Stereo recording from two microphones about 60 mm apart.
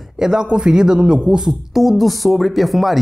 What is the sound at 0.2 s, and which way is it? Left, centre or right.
Speech, centre.